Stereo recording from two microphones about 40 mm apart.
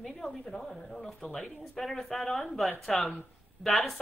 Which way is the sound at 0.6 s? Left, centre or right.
Centre.